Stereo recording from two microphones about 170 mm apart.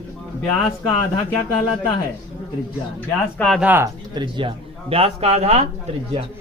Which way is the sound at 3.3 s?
Centre (ahead or behind).